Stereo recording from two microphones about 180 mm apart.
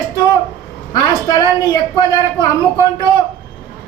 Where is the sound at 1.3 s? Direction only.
20° left (ahead or behind).